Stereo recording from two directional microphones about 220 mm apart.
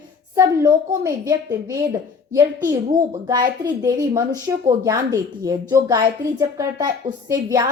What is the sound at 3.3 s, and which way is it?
A woman's voice, 15° right (ahead or behind).